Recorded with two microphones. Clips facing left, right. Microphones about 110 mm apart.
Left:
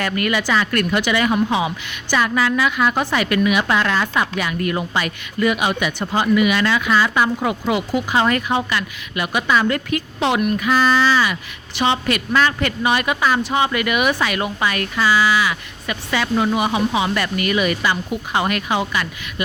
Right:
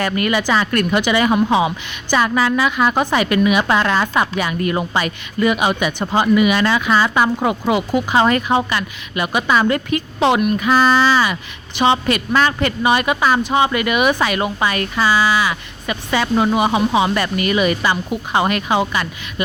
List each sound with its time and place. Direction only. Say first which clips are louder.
0.0 s speech: right 2 dB; 25° right (ahead or behind)